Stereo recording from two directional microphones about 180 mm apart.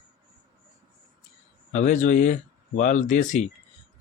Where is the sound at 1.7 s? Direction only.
45° left (ahead or behind).